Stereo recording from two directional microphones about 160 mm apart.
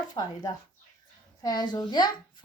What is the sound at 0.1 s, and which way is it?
A woman's voice, 25° left (ahead or behind).